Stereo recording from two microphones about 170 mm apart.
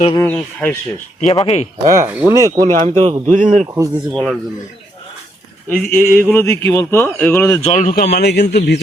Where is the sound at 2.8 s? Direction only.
45° right (ahead or behind).